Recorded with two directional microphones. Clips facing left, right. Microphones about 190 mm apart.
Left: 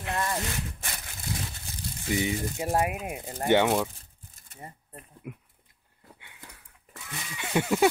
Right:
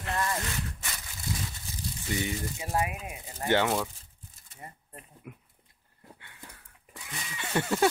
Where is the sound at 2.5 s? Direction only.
45° left (ahead or behind).